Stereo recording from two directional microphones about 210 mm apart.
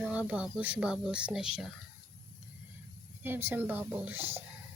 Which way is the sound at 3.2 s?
10° right (ahead or behind).